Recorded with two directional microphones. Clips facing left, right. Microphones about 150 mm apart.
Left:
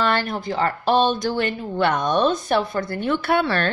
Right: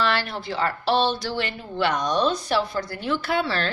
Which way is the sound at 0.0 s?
50° left (ahead or behind).